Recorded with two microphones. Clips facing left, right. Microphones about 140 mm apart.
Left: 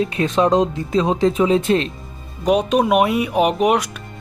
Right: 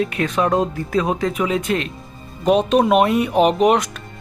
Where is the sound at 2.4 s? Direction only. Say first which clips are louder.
Right 1 dB; 10° left (ahead or behind).